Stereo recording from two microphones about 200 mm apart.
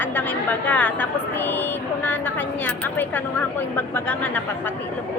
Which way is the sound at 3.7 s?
10° left (ahead or behind).